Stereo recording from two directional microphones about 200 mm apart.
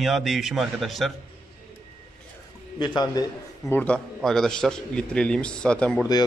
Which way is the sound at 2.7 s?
20° left (ahead or behind).